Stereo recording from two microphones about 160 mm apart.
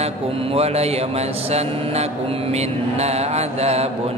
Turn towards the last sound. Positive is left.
turn(degrees=-40)  # may be behind; listen again after turning